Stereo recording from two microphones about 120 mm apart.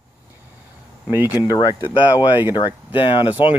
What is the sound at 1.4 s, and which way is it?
Speech, 35° left (ahead or behind).